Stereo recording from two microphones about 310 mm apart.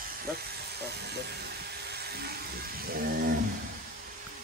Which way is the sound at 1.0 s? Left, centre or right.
Right.